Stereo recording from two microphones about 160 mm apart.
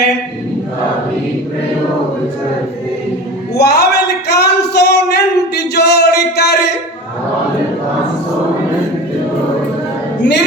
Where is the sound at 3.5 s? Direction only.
90° left.